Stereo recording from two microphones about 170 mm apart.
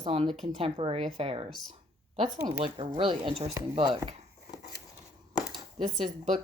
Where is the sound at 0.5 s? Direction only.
35° right (ahead or behind).